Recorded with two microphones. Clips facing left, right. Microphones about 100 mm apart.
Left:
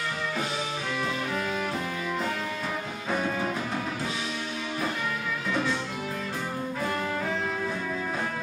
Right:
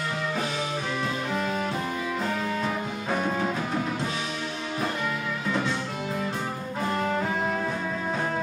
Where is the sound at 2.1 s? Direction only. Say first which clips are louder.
Right 2 dB; 10° right (ahead or behind).